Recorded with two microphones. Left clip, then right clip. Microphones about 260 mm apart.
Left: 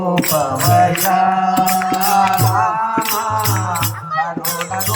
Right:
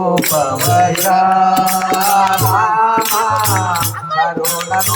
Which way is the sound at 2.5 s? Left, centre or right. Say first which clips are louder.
Right 4 dB; right.